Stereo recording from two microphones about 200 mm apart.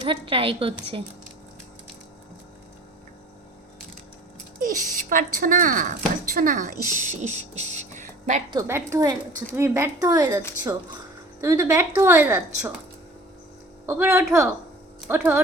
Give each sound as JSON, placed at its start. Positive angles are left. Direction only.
{"t": 0.0, "sound": "a woman's voice", "side_deg": -25}
{"t": 4.6, "sound": "speech", "side_deg": -45}
{"t": 8.4, "sound": "speech", "side_deg": -15}
{"t": 13.8, "sound": "speech", "side_deg": -10}